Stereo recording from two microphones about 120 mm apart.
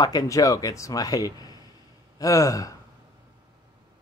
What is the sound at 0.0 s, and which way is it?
Speech, 30° left (ahead or behind).